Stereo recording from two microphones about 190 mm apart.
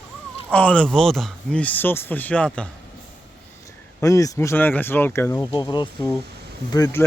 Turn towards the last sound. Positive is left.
turn(degrees=15)  # may be behind; listen again after turning